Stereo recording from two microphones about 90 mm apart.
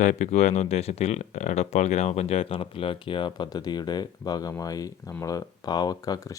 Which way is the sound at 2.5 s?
90° left.